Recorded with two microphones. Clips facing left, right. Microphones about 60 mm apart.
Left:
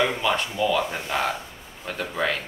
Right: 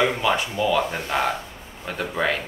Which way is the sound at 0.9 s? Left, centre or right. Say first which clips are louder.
Right 2 dB; centre.